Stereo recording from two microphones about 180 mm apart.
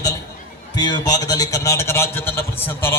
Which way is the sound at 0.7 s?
25° left (ahead or behind).